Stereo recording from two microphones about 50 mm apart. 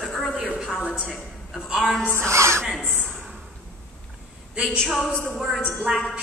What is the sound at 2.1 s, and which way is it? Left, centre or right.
Speech, right.